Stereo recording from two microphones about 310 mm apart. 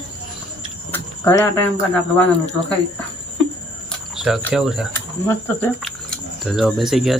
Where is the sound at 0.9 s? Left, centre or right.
Centre.